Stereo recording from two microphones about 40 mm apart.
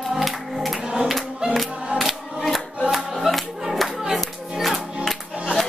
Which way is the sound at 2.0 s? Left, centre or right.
Centre.